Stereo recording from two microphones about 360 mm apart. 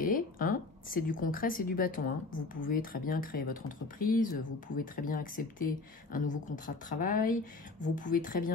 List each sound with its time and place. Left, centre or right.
0.0 s a woman's voice: left